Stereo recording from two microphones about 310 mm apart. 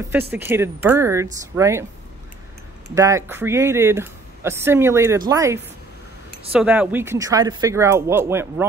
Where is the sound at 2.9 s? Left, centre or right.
Centre.